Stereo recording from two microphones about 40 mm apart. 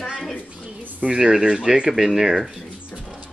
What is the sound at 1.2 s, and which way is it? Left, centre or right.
Speech, centre.